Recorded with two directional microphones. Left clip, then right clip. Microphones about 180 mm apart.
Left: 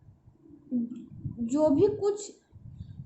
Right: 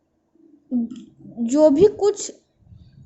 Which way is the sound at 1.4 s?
40° right (ahead or behind).